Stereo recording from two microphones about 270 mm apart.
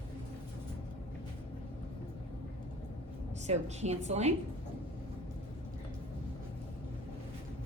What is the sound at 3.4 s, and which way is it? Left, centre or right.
Speech, right.